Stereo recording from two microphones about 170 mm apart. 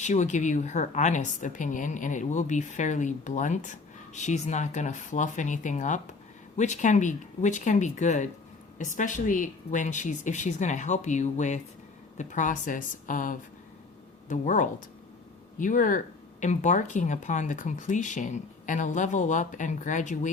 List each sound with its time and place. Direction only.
0.0 s a woman's voice: 45° left (ahead or behind)